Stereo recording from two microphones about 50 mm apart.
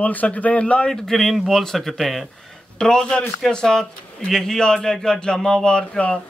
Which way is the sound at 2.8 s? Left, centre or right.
Centre.